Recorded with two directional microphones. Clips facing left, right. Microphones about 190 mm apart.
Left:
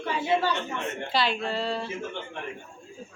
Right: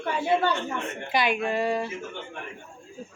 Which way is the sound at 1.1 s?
15° right (ahead or behind).